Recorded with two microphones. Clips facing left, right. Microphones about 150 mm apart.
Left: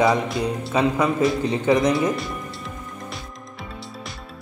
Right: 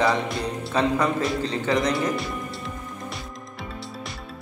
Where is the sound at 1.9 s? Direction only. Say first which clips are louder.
Left 3 dB; centre (ahead or behind).